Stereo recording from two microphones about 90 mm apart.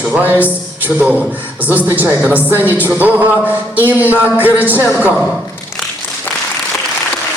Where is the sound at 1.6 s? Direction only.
20° right (ahead or behind).